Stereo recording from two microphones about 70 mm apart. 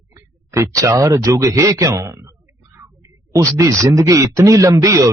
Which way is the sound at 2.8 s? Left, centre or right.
Right.